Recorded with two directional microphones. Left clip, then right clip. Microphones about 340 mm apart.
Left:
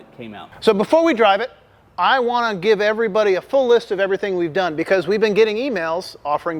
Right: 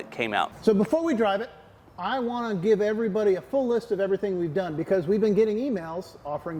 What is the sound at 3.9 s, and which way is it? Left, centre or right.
Speech, centre.